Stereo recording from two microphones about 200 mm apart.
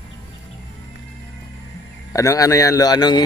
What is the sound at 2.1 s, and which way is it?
Speech, 15° left (ahead or behind).